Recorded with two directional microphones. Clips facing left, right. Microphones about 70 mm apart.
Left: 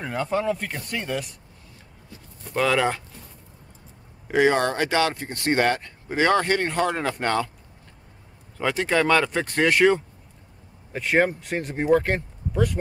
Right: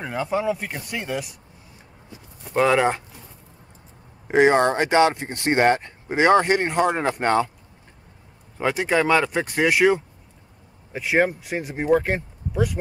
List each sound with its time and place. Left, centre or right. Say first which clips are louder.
0.0 s speech: right 1 dB; centre; by 3.0 s right
4.3 s speech: right 3 dB; right
8.5 s speech: right 1 dB; centre